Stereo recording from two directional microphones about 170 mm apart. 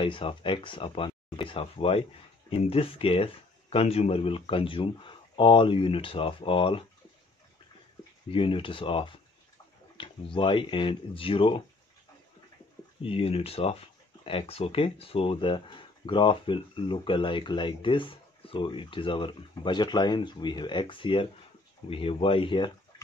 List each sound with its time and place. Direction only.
0.0 s speech: 30° left (ahead or behind)
8.3 s speech: 30° left (ahead or behind)
13.0 s speech: 35° left (ahead or behind)